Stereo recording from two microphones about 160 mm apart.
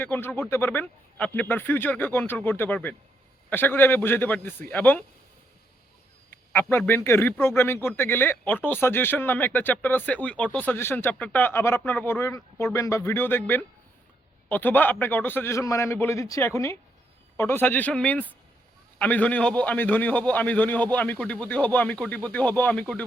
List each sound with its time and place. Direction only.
0.0 s speech: 10° left (ahead or behind)
6.5 s speech: 10° left (ahead or behind)